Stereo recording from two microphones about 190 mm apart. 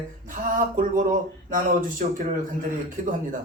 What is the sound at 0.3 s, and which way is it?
A man's voice, 45° right (ahead or behind).